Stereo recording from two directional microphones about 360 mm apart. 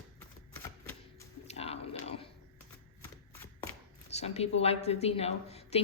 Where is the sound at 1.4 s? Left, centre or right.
Centre.